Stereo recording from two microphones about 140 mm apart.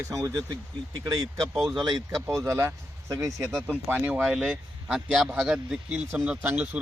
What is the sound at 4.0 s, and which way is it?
Speech, 15° right (ahead or behind).